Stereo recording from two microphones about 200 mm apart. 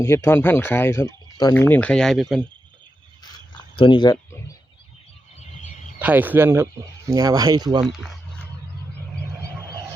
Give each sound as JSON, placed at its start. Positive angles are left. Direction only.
{"t": 0.0, "sound": "speech", "side_deg": 15}
{"t": 3.8, "sound": "speech", "side_deg": 25}
{"t": 6.0, "sound": "speech", "side_deg": -10}